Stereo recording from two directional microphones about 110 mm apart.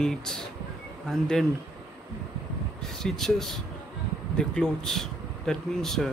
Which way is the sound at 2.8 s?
Centre (ahead or behind).